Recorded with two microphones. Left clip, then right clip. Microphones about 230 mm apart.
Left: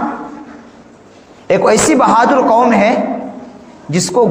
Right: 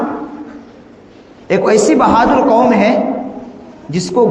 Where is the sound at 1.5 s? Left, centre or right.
Left.